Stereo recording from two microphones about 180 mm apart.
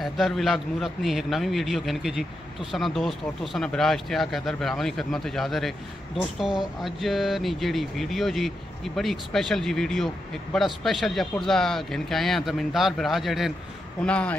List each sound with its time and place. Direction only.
0.0 s a man's voice: centre (ahead or behind)